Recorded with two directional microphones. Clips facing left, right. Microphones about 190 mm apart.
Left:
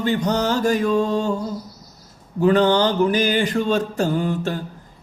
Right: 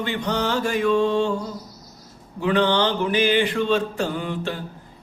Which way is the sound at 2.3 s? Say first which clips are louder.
Left 4 dB; 40° left (ahead or behind).